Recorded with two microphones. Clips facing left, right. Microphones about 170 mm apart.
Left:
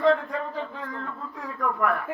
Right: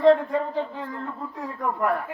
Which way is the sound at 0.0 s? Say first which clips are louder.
Right 4 dB; 30° right (ahead or behind).